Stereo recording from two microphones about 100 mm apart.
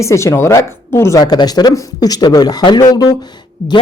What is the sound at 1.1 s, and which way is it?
A woman's voice, 40° left (ahead or behind).